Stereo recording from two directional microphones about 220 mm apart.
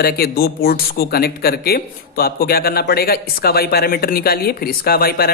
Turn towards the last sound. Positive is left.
turn(degrees=45)  # may be behind; listen again after turning